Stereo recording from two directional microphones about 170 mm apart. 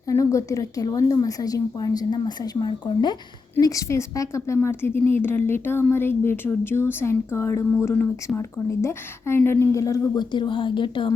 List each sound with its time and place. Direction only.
0.1 s a woman's voice: 15° left (ahead or behind)